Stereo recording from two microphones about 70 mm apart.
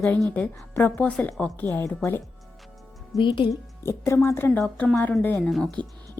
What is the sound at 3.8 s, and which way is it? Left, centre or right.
Speech, left.